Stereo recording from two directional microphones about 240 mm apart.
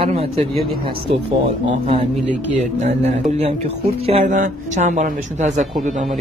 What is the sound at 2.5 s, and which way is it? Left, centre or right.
Speech, right.